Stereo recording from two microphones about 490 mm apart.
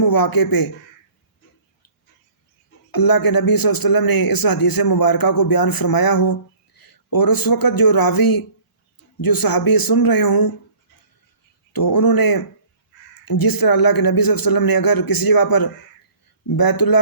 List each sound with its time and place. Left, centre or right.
0.0 s a man's voice: left
2.9 s a man's voice: left
11.7 s a man's voice: left